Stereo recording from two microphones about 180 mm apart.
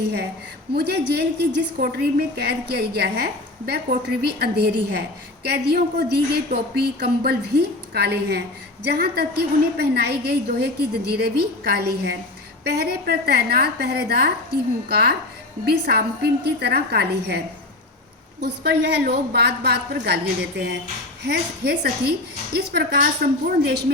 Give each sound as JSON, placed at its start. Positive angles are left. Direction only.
{"t": 0.7, "sound": "a woman's voice", "side_deg": -65}
{"t": 21.2, "sound": "a woman's voice", "side_deg": -65}